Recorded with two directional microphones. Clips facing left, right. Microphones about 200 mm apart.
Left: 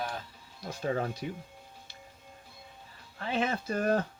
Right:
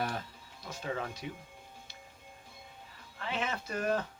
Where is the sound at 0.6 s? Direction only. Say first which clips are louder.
Left 6 dB; 40° left (ahead or behind).